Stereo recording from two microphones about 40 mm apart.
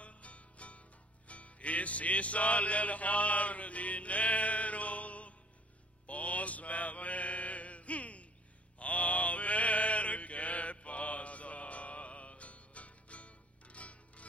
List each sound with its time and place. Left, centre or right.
0.0 s music: left
6.0 s mantra: left